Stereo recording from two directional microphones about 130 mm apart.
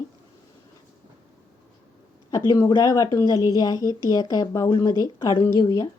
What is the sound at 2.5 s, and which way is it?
A woman's voice, 30° left (ahead or behind).